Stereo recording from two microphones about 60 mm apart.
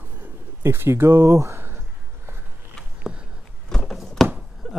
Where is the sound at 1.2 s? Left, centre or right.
Right.